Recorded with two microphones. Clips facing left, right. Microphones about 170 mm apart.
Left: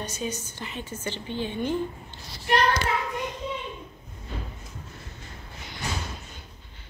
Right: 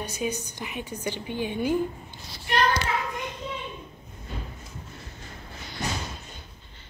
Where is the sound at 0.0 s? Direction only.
10° right (ahead or behind).